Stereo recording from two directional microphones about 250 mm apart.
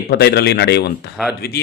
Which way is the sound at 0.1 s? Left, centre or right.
Left.